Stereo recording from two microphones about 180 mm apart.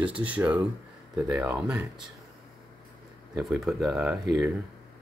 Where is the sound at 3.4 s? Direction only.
Centre (ahead or behind).